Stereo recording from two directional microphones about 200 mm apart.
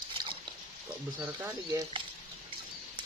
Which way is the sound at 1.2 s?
10° right (ahead or behind).